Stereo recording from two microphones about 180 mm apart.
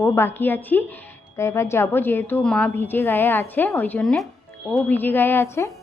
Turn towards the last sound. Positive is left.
turn(degrees=15)  # may be behind; listen again after turning